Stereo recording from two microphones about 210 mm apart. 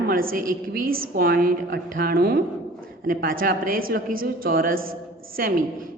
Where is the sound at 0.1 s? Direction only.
45° right (ahead or behind).